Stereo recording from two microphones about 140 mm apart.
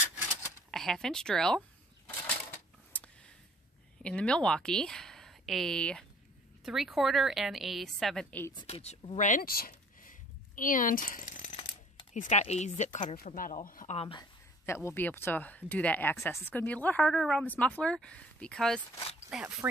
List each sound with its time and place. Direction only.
0.7 s speech: 5° left (ahead or behind)
2.2 s coin: 10° left (ahead or behind)
4.0 s a woman's voice: 5° left (ahead or behind)
8.6 s speech: 45° left (ahead or behind); by 11.5 s 65° left (ahead or behind)
11.5 s a sound: 40° left (ahead or behind)
12.1 s speech: 60° left (ahead or behind)
13.1 s speech: 85° left
13.9 s speech: 40° left (ahead or behind)
14.7 s speech: 15° left (ahead or behind)
19.1 s speech: 10° right (ahead or behind)